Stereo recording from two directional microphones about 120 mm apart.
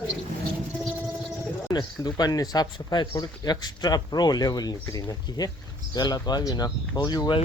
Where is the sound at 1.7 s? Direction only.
35° left (ahead or behind).